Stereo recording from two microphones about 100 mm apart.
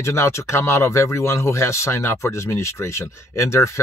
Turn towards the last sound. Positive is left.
turn(degrees=30)  # may be behind; listen again after turning